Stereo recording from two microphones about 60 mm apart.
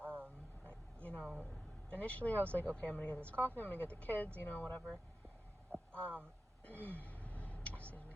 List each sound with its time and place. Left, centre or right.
0.0 s vehicle: right
0.6 s vehicle: left
1.9 s speech: left
5.9 s speech: left
6.7 s a sound: left